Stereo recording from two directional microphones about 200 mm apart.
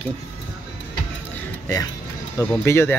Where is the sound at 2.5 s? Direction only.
10° left (ahead or behind).